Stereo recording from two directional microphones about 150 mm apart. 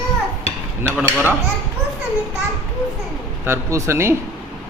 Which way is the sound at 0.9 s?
15° right (ahead or behind).